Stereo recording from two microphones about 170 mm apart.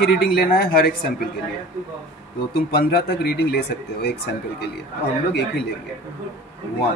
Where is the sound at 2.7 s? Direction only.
65° left (ahead or behind).